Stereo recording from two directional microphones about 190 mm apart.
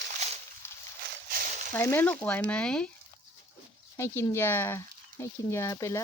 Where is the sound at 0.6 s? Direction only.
10° left (ahead or behind).